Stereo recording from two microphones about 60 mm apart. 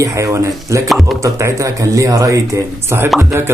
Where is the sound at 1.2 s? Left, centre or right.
Right.